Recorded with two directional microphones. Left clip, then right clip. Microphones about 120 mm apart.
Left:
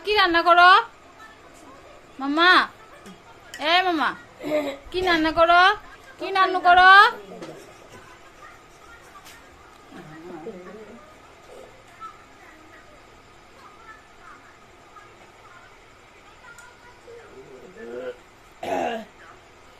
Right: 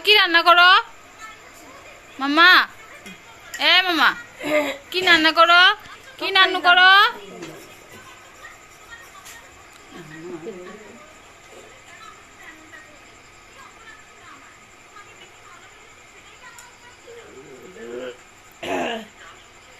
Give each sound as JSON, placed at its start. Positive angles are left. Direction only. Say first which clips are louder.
{"t": 0.0, "sound": "a woman's voice", "louder": "right 4 dB", "side_deg": 0}
{"t": 2.1, "sound": "a woman's voice", "louder": "right 4 dB", "side_deg": 0}
{"t": 3.6, "sound": "a woman's voice", "louder": "right 4 dB", "side_deg": 15}
{"t": 4.4, "sound": "speech", "louder": "right 4 dB", "side_deg": -55}
{"t": 4.9, "sound": "a woman's voice", "louder": "right 6 dB", "side_deg": 20}
{"t": 6.1, "sound": "a woman's voice", "louder": "right 4 dB", "side_deg": 0}